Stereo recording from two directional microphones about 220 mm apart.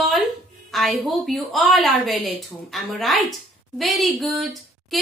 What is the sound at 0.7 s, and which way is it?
A woman's voice, centre (ahead or behind).